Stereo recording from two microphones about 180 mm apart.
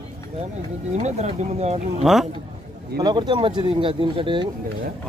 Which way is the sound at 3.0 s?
25° right (ahead or behind).